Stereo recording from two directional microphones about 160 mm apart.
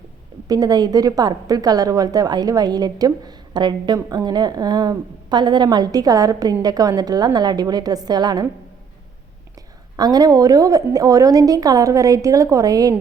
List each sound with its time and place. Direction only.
0.4 s a woman's voice: 25° right (ahead or behind)
10.0 s a woman's voice: 25° right (ahead or behind)